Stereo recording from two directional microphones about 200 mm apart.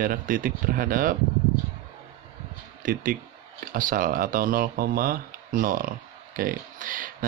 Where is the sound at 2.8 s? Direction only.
45° right (ahead or behind).